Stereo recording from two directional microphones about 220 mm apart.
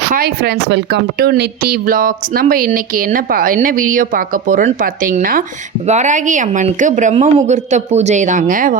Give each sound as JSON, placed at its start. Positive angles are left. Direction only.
{"t": 0.1, "sound": "speech", "side_deg": -45}